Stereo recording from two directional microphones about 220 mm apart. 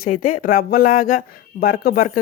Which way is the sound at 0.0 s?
40° left (ahead or behind).